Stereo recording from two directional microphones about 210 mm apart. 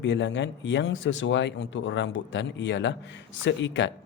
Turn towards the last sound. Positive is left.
turn(degrees=60)  # may be behind; listen again after turning